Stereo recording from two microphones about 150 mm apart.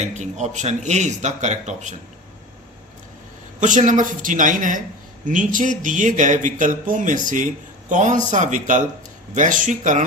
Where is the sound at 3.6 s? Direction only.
55° right (ahead or behind).